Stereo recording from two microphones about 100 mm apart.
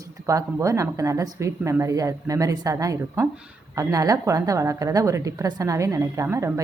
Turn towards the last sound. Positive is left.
turn(degrees=-30)  # may be behind; listen again after turning